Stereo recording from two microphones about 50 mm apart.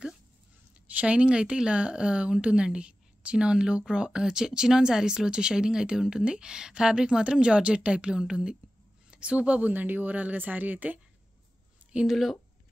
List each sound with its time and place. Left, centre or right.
0.8 s speech: right
12.1 s speech: centre